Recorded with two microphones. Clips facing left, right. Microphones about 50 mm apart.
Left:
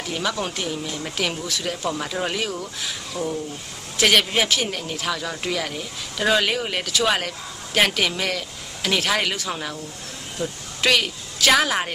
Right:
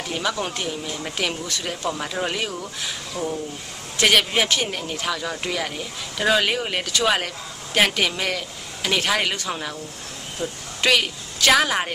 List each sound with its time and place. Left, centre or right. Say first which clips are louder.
0.1 s speech: even; centre
3.1 s speech: left 1 dB; right
3.9 s a woman's voice: even; centre